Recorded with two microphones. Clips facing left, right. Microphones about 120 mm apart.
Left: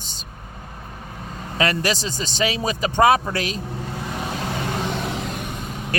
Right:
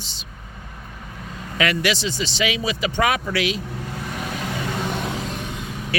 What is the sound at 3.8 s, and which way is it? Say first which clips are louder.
Vehicle: left 1 dB; 30° left (ahead or behind).